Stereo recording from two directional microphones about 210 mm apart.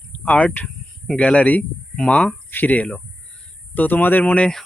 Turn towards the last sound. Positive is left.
turn(degrees=5)  # may be behind; listen again after turning